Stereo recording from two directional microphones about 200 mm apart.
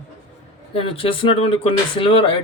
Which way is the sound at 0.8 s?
25° left (ahead or behind).